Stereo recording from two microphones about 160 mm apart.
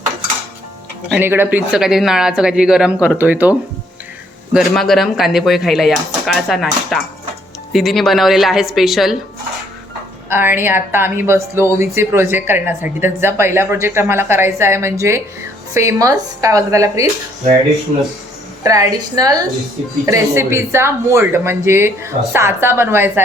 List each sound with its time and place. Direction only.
1.1 s speech: 15° right (ahead or behind)
4.5 s speech: centre (ahead or behind)
10.2 s speech: 15° right (ahead or behind)
18.6 s speech: 20° right (ahead or behind)